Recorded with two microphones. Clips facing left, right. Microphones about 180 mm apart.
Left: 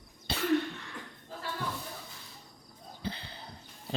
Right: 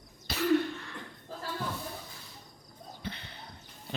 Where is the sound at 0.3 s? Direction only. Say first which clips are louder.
Right 2 dB; 30° left (ahead or behind).